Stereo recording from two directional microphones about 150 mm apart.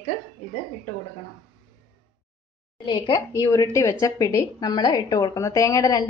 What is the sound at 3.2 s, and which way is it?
A woman's voice, 20° left (ahead or behind).